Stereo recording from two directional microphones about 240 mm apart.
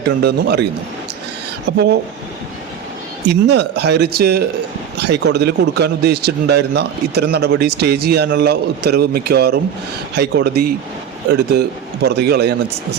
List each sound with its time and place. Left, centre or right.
0.2 s speech: right
1.7 s speech: right
3.2 s speech: right